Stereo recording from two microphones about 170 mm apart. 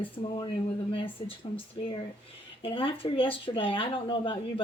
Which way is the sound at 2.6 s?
30° left (ahead or behind).